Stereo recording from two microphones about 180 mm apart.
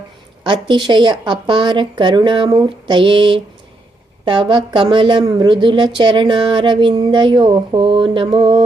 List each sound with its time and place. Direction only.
0.4 s a woman's voice: 25° right (ahead or behind)